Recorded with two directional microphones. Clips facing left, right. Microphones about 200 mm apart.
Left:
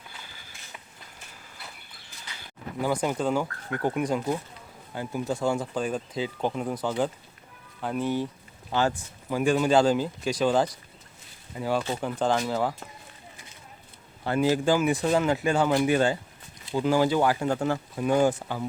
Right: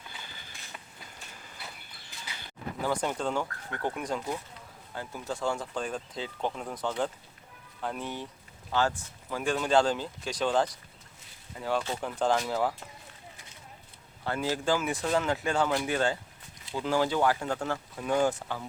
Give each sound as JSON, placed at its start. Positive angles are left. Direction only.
{"t": 0.3, "sound": "vehicle", "side_deg": 10}
{"t": 2.8, "sound": "speech", "side_deg": 10}
{"t": 9.3, "sound": "speech", "side_deg": 10}
{"t": 14.3, "sound": "speech", "side_deg": 15}